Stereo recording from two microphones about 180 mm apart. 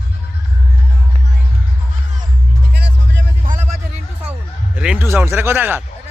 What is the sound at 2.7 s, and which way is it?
Music, 70° right (ahead or behind).